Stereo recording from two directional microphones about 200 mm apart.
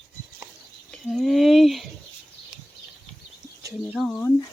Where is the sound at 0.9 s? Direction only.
Centre (ahead or behind).